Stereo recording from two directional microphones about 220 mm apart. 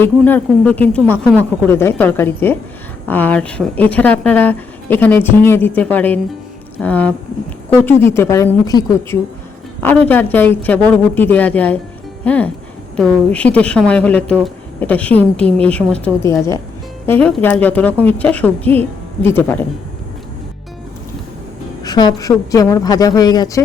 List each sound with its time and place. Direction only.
0.2 s a woman's voice: 5° left (ahead or behind)
21.8 s a woman's voice: 20° left (ahead or behind)